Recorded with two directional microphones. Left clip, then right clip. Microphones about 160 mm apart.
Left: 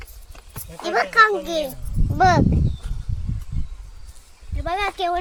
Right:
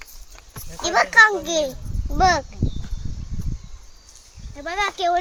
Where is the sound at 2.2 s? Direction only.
5° right (ahead or behind).